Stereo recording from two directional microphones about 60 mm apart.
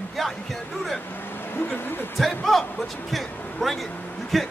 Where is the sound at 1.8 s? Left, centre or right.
Left.